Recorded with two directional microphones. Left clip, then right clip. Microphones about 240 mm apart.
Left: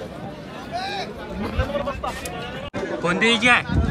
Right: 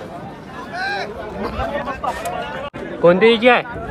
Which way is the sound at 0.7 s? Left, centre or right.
Centre.